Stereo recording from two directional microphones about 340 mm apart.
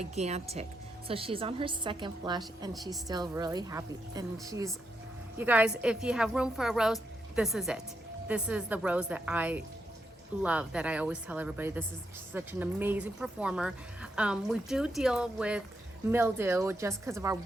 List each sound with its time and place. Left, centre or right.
0.0 s a woman's voice: centre